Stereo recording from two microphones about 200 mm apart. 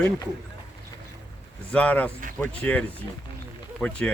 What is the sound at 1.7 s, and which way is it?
Speech, 5° left (ahead or behind).